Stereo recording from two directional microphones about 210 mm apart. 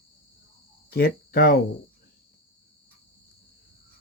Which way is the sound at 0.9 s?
45° left (ahead or behind).